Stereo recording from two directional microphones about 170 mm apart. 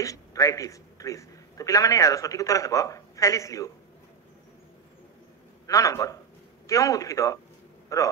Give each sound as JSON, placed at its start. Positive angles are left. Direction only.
{"t": 0.0, "sound": "a man's voice", "side_deg": 20}
{"t": 5.7, "sound": "a man's voice", "side_deg": 20}